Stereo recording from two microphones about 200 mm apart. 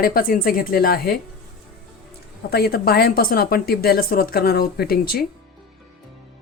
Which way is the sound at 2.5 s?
50° left (ahead or behind).